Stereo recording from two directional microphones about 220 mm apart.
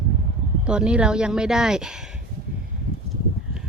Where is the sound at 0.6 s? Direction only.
5° right (ahead or behind).